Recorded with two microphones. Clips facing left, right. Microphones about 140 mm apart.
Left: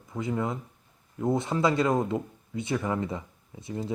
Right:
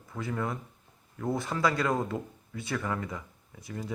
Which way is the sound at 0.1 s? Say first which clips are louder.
Left 4 dB; 20° left (ahead or behind).